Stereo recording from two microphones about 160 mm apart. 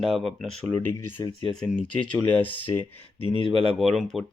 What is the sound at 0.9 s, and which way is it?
Speech, 15° left (ahead or behind).